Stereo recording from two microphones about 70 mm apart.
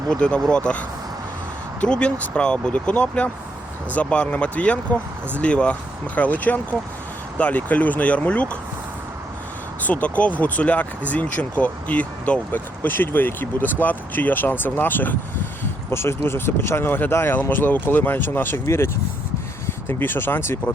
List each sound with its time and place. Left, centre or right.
0.1 s speech: centre
9.8 s speech: left